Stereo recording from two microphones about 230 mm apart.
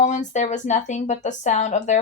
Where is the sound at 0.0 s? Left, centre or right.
Left.